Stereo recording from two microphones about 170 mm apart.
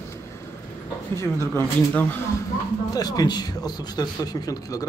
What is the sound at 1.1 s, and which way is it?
Speech, 15° left (ahead or behind).